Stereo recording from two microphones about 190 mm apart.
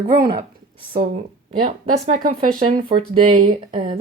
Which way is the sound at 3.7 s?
30° right (ahead or behind).